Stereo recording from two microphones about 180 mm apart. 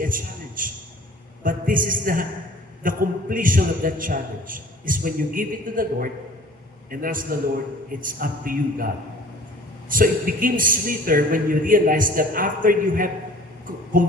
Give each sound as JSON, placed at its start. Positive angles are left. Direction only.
{"t": 0.0, "sound": "a sound", "side_deg": -50}
{"t": 1.5, "sound": "a man's voice", "side_deg": -50}
{"t": 9.9, "sound": "a man's voice", "side_deg": -50}